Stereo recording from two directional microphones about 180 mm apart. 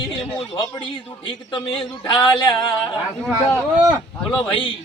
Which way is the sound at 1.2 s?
30° left (ahead or behind).